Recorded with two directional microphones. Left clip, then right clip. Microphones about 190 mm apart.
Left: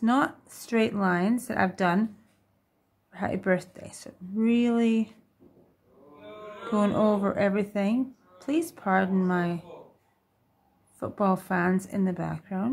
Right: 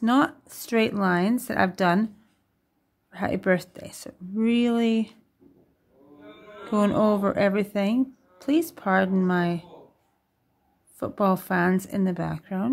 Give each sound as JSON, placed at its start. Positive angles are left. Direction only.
{"t": 0.0, "sound": "speech", "side_deg": -25}
{"t": 3.1, "sound": "speech", "side_deg": -25}
{"t": 6.7, "sound": "speech", "side_deg": -25}
{"t": 11.0, "sound": "speech", "side_deg": -25}